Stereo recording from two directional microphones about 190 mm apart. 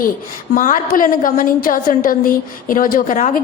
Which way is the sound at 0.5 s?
45° left (ahead or behind).